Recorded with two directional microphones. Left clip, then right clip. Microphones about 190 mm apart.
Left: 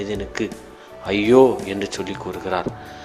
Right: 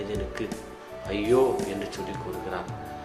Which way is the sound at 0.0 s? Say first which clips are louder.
Left 6 dB; 40° left (ahead or behind).